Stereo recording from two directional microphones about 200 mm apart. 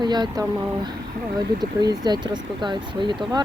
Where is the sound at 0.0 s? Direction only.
20° right (ahead or behind).